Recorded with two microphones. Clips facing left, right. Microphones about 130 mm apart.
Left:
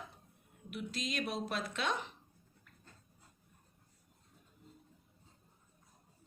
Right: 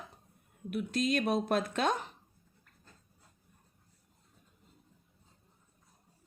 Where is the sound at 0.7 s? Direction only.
50° right (ahead or behind).